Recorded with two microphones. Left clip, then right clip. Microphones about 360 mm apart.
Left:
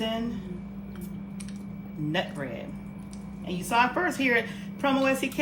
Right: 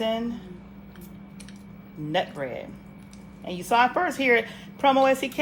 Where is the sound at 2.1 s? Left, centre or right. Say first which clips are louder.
Right 4 dB; right.